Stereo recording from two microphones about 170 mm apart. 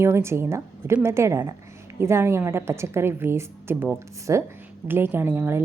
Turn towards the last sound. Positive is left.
turn(degrees=-15)  # may be behind; listen again after turning